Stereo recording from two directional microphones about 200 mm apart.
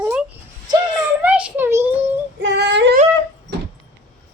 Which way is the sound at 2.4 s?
60° right (ahead or behind).